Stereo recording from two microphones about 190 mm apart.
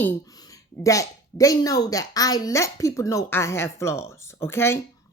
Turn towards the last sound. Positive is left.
turn(degrees=10)  # may be behind; listen again after turning